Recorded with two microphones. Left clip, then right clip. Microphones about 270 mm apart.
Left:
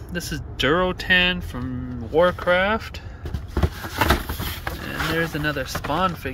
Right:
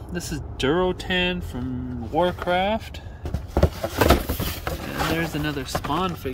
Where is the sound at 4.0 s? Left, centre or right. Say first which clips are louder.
Right 1 dB; right.